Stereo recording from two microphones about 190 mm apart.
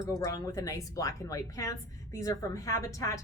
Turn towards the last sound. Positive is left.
turn(degrees=15)  # may be behind; listen again after turning